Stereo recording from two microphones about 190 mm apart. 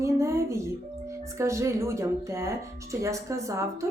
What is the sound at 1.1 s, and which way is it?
Speech, 15° right (ahead or behind).